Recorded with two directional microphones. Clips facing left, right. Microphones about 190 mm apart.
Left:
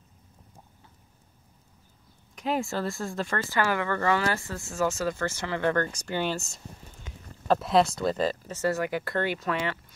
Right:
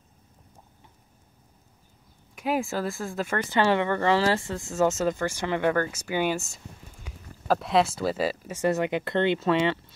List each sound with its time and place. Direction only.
2.3 s speech: 5° right (ahead or behind)
3.3 s speech: 20° right (ahead or behind)